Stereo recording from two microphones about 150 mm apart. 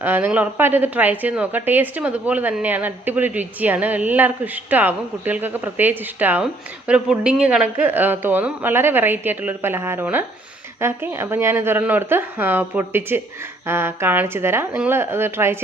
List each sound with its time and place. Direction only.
0.0 s a woman's voice: 15° right (ahead or behind)